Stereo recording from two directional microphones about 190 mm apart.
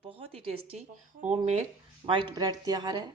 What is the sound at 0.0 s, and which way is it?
Speech, 30° right (ahead or behind).